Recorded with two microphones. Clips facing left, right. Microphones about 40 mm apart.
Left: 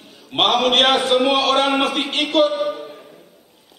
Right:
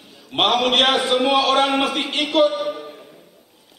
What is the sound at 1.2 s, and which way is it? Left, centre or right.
A man's voice, centre.